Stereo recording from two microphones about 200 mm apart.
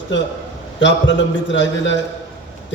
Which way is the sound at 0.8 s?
65° left (ahead or behind).